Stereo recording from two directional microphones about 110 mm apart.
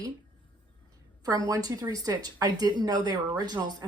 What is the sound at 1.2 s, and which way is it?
Speech, 30° right (ahead or behind).